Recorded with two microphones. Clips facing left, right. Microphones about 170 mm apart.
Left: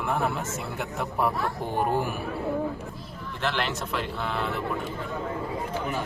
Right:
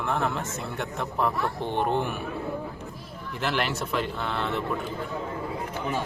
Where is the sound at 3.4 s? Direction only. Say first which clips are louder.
Right 1 dB; 5° right (ahead or behind).